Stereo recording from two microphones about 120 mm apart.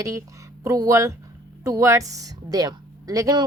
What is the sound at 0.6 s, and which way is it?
Speech, 25° right (ahead or behind).